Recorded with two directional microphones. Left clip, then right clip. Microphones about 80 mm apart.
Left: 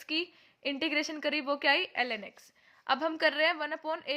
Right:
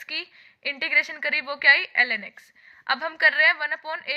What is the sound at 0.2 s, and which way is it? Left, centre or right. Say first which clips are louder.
A woman's voice: right 2 dB; left.